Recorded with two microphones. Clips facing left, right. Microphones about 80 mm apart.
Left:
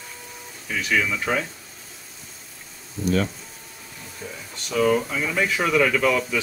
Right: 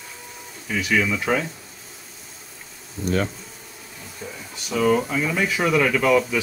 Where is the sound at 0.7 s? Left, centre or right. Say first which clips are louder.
Right 2 dB; centre.